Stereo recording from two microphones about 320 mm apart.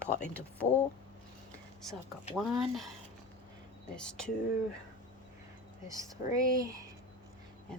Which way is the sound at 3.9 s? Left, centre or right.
Centre.